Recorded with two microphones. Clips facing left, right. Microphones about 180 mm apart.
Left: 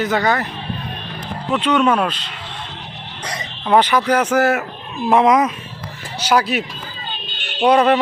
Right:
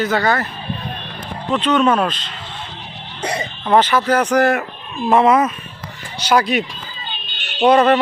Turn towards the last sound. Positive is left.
turn(degrees=10)  # may be behind; listen again after turning